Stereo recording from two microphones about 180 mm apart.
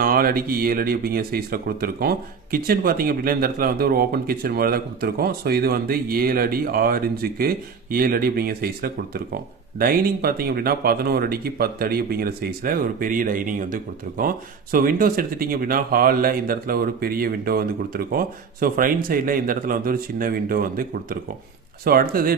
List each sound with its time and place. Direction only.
0.0 s speech: 55° right (ahead or behind)